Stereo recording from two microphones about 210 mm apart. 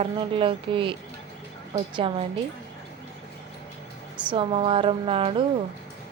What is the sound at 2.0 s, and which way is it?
Speech, 25° right (ahead or behind).